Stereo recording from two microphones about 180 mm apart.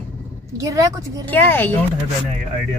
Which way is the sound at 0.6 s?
20° right (ahead or behind).